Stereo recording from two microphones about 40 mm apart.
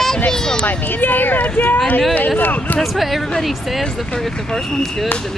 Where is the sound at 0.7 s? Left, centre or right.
Left.